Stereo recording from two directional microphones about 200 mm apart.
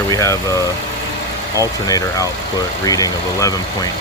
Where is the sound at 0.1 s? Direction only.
15° left (ahead or behind).